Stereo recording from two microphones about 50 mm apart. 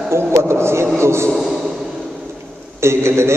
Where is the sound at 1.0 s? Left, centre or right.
Right.